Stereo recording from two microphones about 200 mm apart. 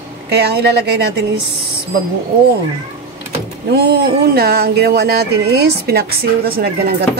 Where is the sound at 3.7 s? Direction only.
55° right (ahead or behind).